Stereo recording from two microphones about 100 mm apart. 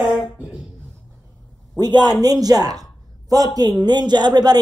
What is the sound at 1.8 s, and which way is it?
A man's voice, 45° right (ahead or behind).